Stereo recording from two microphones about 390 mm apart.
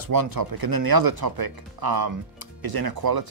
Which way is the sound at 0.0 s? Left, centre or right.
Right.